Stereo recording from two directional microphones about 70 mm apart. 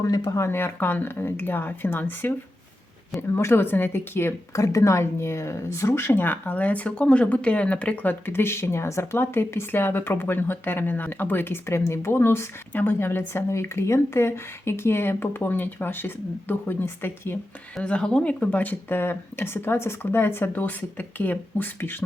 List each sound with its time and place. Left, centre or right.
0.0 s speech: left
0.3 s speech: left
4.5 s speech: left; by 8.1 s centre
8.2 s speech: left
17.8 s speech: centre